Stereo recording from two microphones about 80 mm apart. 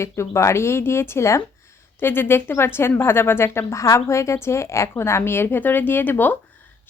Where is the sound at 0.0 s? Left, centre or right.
Left.